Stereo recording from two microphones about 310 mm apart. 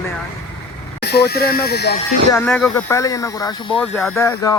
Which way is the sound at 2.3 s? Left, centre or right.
Centre.